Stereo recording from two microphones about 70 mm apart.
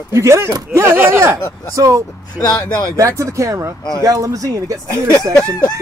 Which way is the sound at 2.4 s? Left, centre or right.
Left.